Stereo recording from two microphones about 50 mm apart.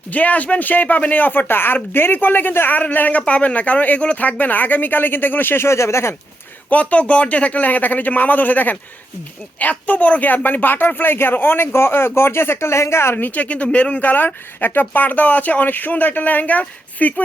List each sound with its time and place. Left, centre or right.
0.1 s speech: left
5.6 s speech: left
6.7 s a man's voice: left
13.1 s speech: left